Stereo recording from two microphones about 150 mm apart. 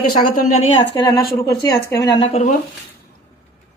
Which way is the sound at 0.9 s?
25° left (ahead or behind).